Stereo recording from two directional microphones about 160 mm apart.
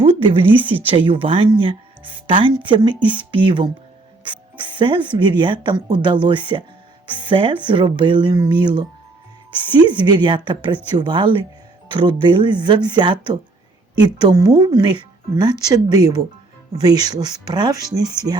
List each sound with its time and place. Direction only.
0.0 s a sound: 35° right (ahead or behind)
0.5 s a woman's voice: 10° right (ahead or behind)
0.9 s speech: 35° right (ahead or behind)